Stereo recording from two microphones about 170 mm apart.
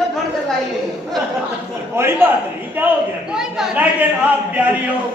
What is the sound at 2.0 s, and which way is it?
A man's voice, 15° right (ahead or behind).